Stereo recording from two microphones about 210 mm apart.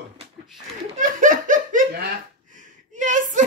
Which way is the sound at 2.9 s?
35° right (ahead or behind).